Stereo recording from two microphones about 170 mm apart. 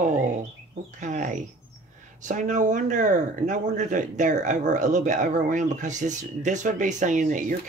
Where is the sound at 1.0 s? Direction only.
50° right (ahead or behind).